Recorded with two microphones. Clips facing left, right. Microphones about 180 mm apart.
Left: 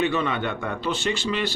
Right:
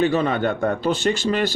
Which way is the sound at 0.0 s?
40° right (ahead or behind).